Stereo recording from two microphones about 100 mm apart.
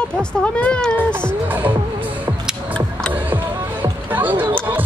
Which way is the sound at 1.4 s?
15° right (ahead or behind).